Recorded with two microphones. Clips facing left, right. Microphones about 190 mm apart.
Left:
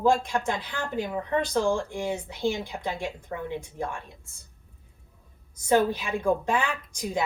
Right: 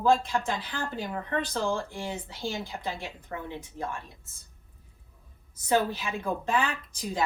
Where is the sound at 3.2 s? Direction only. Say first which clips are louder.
Left 4 dB; 15° left (ahead or behind).